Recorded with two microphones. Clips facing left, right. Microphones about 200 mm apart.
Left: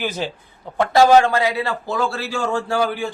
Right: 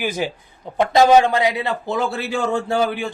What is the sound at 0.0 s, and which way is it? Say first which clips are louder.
A man's voice: right 2 dB; 10° right (ahead or behind).